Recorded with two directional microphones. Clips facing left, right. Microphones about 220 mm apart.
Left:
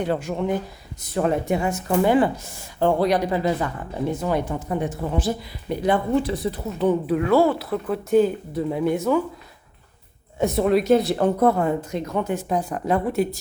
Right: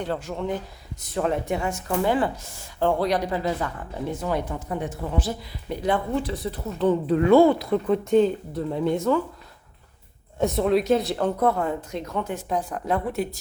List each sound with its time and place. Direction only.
0.0 s speech: 15° left (ahead or behind)
10.4 s speech: 5° left (ahead or behind)